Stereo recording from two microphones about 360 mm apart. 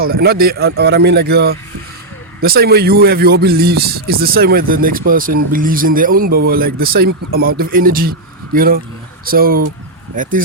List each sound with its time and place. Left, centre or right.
0.0 s speech: right